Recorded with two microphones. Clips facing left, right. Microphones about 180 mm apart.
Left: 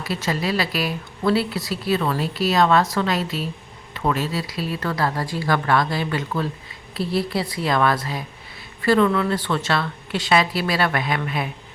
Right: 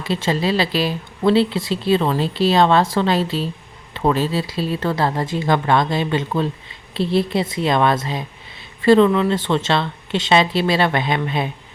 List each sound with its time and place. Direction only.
0.0 s speech: 25° right (ahead or behind)